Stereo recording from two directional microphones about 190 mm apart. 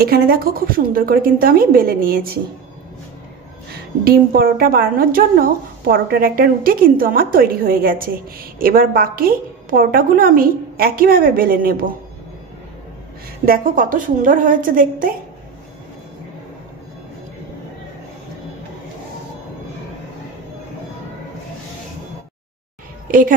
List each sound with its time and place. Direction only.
0.0 s a woman's voice: 50° right (ahead or behind)
3.7 s a woman's voice: 50° right (ahead or behind)
13.5 s a woman's voice: 45° right (ahead or behind)